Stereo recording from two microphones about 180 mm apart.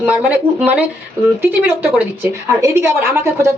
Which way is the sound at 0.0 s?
10° right (ahead or behind).